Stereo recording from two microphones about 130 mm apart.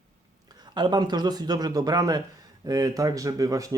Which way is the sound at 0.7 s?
35° right (ahead or behind).